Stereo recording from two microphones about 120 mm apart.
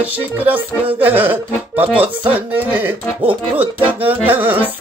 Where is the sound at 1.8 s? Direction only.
50° right (ahead or behind).